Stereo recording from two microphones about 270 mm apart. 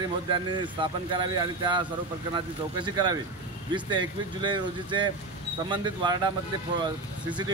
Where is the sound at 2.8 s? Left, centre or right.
Centre.